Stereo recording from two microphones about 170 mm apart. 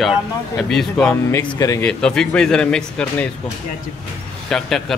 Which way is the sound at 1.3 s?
20° left (ahead or behind).